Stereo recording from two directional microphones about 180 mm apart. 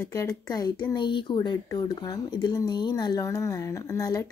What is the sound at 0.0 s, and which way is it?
Speech, 15° left (ahead or behind).